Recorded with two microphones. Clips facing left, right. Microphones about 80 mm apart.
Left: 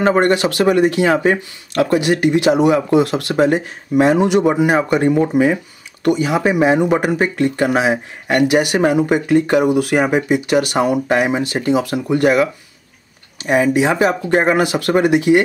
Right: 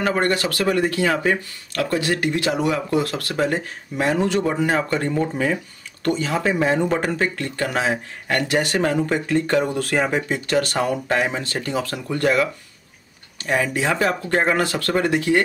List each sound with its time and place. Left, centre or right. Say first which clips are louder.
0.0 s speech: left 7 dB; left